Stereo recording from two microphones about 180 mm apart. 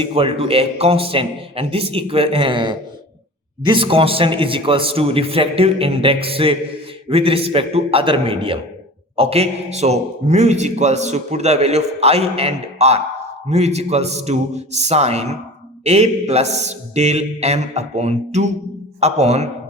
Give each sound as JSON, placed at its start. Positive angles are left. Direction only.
{"t": 0.0, "sound": "a man's voice", "side_deg": -30}